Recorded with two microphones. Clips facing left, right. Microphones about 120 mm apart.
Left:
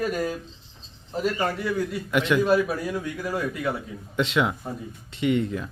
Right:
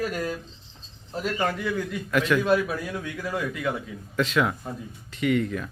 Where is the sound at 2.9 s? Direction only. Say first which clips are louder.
Left 2 dB; 5° left (ahead or behind).